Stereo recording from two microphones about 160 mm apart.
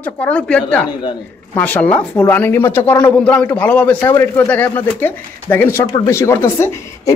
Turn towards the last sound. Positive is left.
turn(degrees=15)  # may be behind; listen again after turning